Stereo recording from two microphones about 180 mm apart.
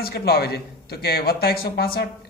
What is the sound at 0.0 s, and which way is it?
Speech, 60° left (ahead or behind).